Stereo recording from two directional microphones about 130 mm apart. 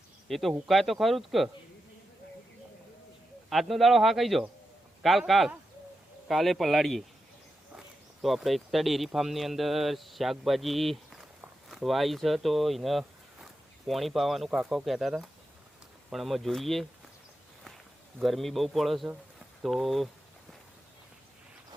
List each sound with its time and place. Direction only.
0.3 s a man's voice: centre (ahead or behind)
3.5 s a man's voice: centre (ahead or behind)
18.2 s a man's voice: centre (ahead or behind)